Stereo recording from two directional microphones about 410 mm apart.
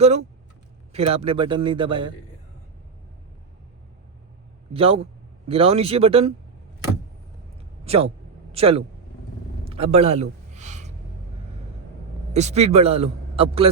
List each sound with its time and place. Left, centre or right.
0.0 s a man's voice: centre
4.7 s a man's voice: centre
7.9 s a man's voice: centre
9.6 s a sound: centre
12.3 s a man's voice: centre